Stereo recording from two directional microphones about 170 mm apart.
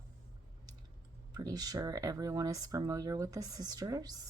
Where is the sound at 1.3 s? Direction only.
20° right (ahead or behind).